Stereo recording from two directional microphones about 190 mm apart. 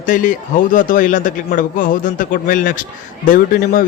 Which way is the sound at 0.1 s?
45° left (ahead or behind).